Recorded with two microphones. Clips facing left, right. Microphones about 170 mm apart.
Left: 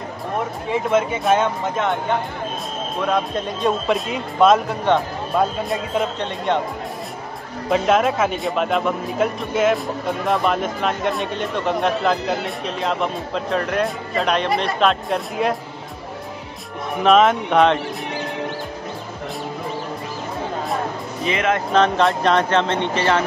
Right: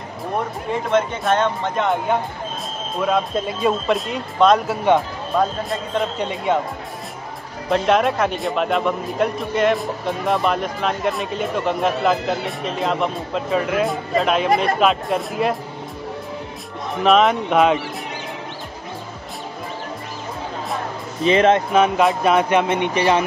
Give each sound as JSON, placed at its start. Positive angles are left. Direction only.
{"t": 0.9, "sound": "speech", "side_deg": 5}
{"t": 3.0, "sound": "speech", "side_deg": -5}
{"t": 6.1, "sound": "speech", "side_deg": -10}
{"t": 7.7, "sound": "speech", "side_deg": 0}
{"t": 17.0, "sound": "speech", "side_deg": 0}
{"t": 21.3, "sound": "speech", "side_deg": -30}
{"t": 21.7, "sound": "speech", "side_deg": -10}